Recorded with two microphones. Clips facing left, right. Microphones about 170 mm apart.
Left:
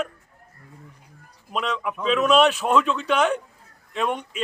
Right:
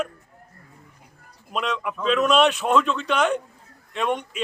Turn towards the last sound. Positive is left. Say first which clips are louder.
# right 1 dB
turn(degrees=5)  # may be behind; listen again after turning